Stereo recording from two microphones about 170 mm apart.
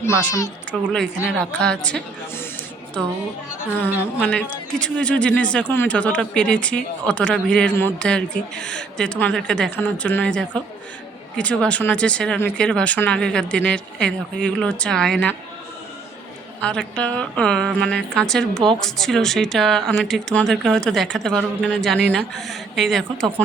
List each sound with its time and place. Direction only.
0.0 s speech: 10° left (ahead or behind)
3.8 s a woman's voice: 10° right (ahead or behind)
4.2 s speech: 10° left (ahead or behind)
16.6 s a woman's voice: 5° left (ahead or behind)